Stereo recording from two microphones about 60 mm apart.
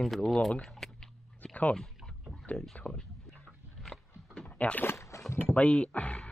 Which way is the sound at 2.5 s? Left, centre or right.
Left.